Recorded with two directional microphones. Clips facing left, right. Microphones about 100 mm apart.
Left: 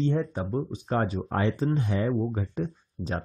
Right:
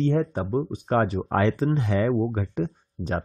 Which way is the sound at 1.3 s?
90° right.